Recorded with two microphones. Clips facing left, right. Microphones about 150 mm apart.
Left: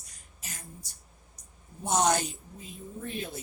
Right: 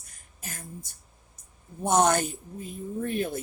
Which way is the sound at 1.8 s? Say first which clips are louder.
Right 4 dB; 55° right (ahead or behind).